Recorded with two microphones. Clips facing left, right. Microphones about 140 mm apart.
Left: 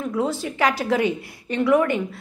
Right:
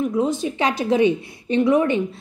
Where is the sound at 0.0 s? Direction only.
20° right (ahead or behind).